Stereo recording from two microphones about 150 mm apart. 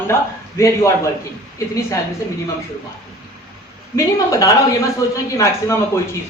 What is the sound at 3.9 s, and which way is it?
A woman's voice, 20° left (ahead or behind).